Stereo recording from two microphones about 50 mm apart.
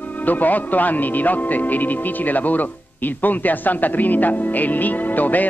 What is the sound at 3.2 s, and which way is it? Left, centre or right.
Music, left.